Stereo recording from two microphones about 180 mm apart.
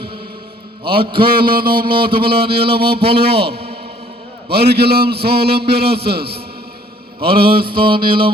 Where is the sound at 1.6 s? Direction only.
55° right (ahead or behind).